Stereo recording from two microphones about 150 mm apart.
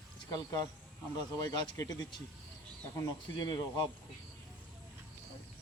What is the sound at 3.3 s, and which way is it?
Speech, 30° left (ahead or behind).